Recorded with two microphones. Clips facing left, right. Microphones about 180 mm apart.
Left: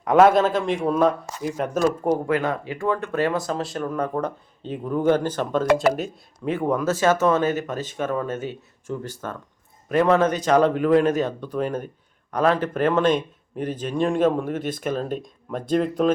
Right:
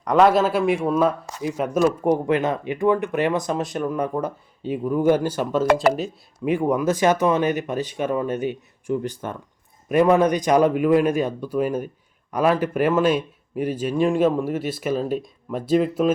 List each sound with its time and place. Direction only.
0.0 s speech: 5° left (ahead or behind)
2.2 s speech: 20° right (ahead or behind); by 6.1 s centre (ahead or behind)
6.4 s speech: 10° right (ahead or behind)